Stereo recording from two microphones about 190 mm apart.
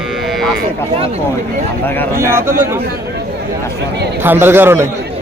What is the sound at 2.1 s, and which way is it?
Speech, 15° right (ahead or behind).